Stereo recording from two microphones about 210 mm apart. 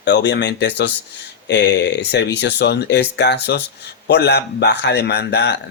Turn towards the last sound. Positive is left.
turn(degrees=55)  # may be behind; listen again after turning